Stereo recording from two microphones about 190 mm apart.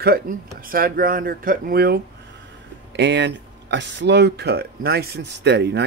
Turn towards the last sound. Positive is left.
turn(degrees=-60)  # may be behind; listen again after turning